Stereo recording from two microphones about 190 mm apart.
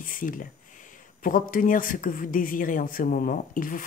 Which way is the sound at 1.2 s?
45° left (ahead or behind).